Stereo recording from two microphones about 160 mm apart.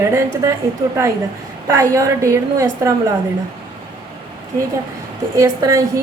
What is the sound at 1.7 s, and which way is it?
A woman's voice, 20° right (ahead or behind).